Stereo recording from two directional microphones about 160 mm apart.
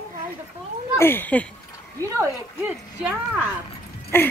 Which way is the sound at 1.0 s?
15° left (ahead or behind).